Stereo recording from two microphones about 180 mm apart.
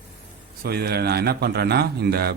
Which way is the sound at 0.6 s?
60° right (ahead or behind).